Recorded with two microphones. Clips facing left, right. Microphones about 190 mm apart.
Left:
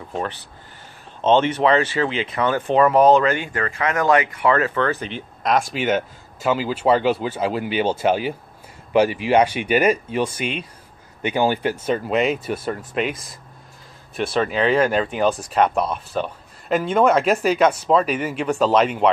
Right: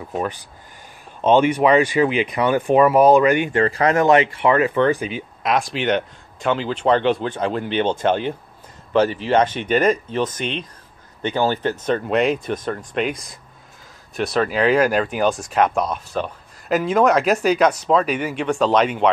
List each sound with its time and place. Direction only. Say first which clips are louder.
0.1 s speech: right 2 dB; 10° right (ahead or behind)